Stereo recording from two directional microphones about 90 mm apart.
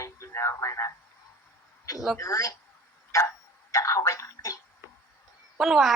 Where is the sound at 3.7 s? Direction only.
35° left (ahead or behind).